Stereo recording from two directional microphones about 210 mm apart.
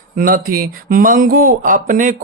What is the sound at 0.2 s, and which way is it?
Speech, 45° right (ahead or behind).